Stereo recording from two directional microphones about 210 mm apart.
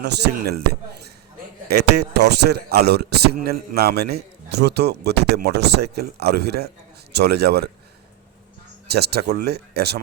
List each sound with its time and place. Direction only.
0.0 s a man's voice: 50° right (ahead or behind)
1.7 s a man's voice: 50° right (ahead or behind)
8.9 s a man's voice: 50° right (ahead or behind)